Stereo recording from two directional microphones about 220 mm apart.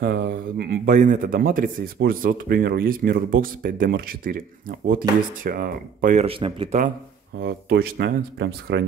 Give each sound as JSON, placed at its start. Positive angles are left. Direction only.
{"t": 0.0, "sound": "speech", "side_deg": -50}
{"t": 6.2, "sound": "speech", "side_deg": -25}
{"t": 7.3, "sound": "speech", "side_deg": -45}